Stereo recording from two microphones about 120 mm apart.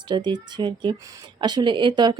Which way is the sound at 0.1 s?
40° right (ahead or behind).